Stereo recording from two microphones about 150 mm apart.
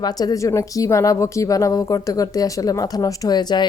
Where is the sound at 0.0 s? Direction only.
25° left (ahead or behind).